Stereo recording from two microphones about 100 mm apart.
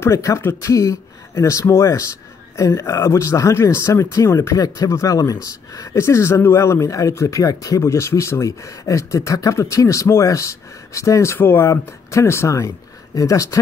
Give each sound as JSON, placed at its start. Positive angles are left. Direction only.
{"t": 0.0, "sound": "speech", "side_deg": 30}